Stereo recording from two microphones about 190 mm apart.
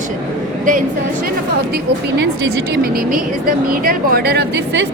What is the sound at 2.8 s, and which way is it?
A woman's voice, 50° right (ahead or behind).